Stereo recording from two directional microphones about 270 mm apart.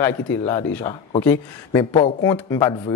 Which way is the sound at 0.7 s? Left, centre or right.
Centre.